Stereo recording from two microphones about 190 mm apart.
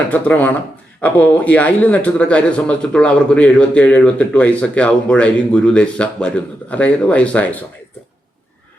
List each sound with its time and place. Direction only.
0.1 s speech: 10° left (ahead or behind)